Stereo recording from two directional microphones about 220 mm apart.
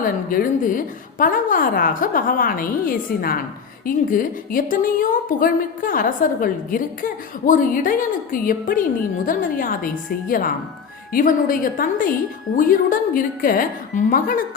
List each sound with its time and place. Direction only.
0.0 s a woman's voice: 40° left (ahead or behind)